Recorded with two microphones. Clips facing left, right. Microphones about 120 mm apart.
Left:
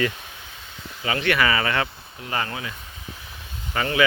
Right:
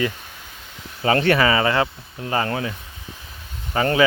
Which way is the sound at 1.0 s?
35° right (ahead or behind).